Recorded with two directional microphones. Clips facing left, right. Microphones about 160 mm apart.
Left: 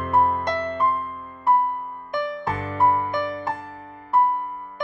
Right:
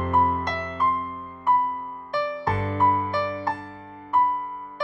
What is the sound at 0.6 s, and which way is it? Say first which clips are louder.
Music: left 2 dB; 30° left (ahead or behind).